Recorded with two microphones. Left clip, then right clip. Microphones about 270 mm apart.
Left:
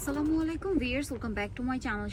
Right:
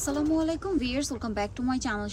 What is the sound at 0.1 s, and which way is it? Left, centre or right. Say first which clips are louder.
Speech: right 3 dB; centre.